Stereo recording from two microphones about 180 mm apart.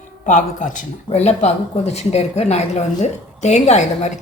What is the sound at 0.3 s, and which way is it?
A woman's voice, 45° left (ahead or behind).